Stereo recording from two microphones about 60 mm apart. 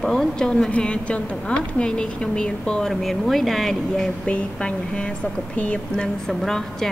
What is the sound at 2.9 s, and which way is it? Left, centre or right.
Speech, centre.